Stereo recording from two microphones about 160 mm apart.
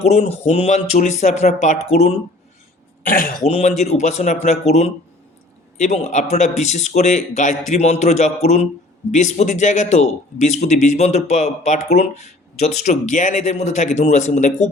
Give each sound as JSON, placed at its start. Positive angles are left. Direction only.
{"t": 0.0, "sound": "speech", "side_deg": 45}
{"t": 3.1, "sound": "speech", "side_deg": 60}
{"t": 3.4, "sound": "speech", "side_deg": 45}